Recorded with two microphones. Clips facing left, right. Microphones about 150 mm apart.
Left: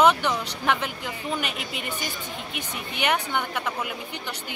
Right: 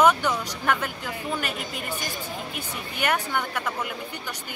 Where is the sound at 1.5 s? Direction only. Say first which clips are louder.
Right 1 dB; 45° right (ahead or behind).